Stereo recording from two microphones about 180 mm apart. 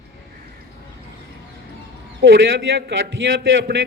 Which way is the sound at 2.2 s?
60° right (ahead or behind).